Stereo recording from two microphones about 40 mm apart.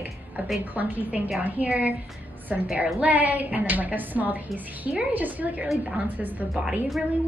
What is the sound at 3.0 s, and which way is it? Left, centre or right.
A woman's voice, right.